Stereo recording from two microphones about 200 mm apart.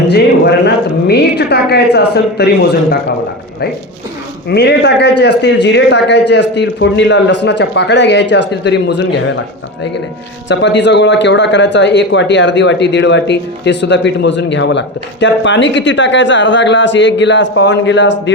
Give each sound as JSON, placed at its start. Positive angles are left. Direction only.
{"t": 0.6, "sound": "speech", "side_deg": 55}
{"t": 4.4, "sound": "speech", "side_deg": 55}
{"t": 10.5, "sound": "speech", "side_deg": 60}